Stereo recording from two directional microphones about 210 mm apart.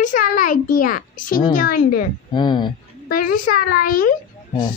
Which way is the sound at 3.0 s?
40° left (ahead or behind).